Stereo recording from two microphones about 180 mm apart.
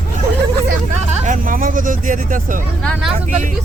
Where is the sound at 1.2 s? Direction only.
45° right (ahead or behind).